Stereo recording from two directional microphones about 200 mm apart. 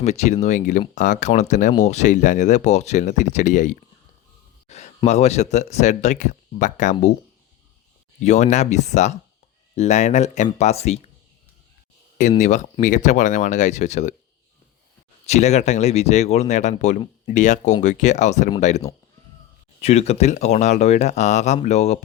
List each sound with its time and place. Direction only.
0.0 s speech: 35° left (ahead or behind)
8.2 s speech: 35° left (ahead or behind)
12.4 s speech: 35° left (ahead or behind)
15.3 s speech: 35° left (ahead or behind)